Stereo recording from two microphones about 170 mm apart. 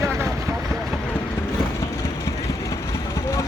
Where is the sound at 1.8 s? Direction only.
15° left (ahead or behind).